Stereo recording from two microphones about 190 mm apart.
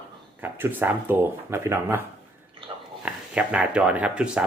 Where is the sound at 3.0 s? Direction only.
5° right (ahead or behind).